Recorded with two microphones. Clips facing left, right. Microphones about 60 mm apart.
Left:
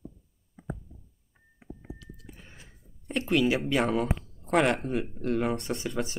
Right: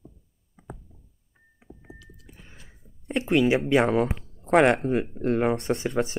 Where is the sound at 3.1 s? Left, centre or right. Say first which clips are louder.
Right 3 dB; centre.